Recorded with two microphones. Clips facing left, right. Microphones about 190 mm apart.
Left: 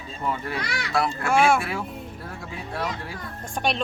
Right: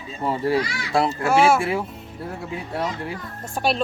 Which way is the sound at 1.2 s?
25° right (ahead or behind).